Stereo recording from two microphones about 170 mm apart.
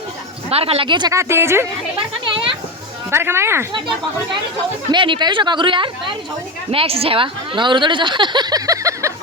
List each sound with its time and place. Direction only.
0.5 s a woman's voice: 35° right (ahead or behind); by 1.6 s 15° right (ahead or behind)
2.0 s a sound: 30° right (ahead or behind)
3.1 s speech: 15° right (ahead or behind)
3.7 s a woman's voice: 25° right (ahead or behind)